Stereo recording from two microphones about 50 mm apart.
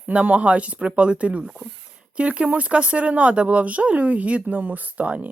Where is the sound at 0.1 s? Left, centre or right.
Right.